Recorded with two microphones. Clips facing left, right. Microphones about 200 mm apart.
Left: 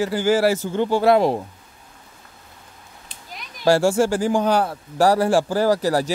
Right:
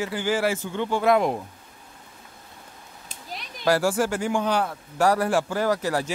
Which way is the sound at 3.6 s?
25° left (ahead or behind).